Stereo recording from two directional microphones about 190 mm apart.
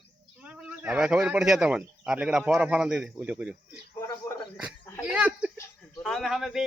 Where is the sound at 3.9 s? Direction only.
15° left (ahead or behind).